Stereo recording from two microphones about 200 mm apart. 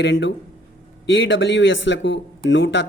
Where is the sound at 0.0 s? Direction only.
60° left (ahead or behind).